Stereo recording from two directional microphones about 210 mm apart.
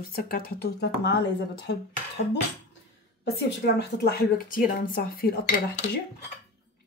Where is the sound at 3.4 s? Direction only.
50° left (ahead or behind).